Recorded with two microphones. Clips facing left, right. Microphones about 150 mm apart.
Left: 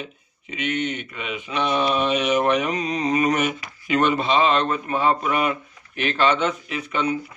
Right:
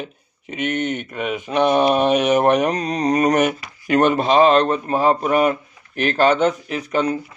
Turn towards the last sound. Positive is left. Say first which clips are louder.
# right 4 dB
turn(degrees=-40)  # may be behind; listen again after turning